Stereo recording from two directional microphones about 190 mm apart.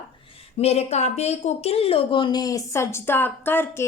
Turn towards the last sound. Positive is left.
turn(degrees=10)  # may be behind; listen again after turning